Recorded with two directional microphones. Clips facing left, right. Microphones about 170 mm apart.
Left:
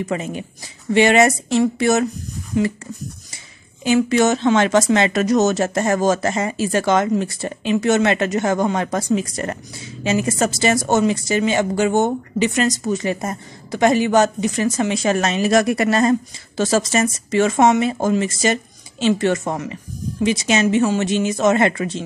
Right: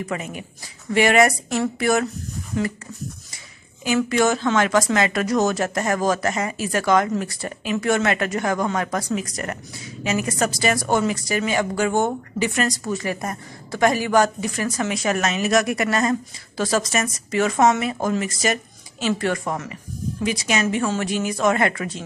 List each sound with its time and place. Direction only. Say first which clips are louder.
0.0 s speech: left 5 dB; 25° left (ahead or behind)
3.8 s speech: left 4 dB; 25° left (ahead or behind)